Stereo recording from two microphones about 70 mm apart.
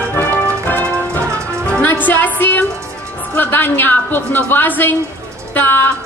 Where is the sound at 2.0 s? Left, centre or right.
Left.